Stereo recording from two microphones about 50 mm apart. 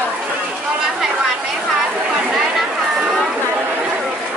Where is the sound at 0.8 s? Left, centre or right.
Centre.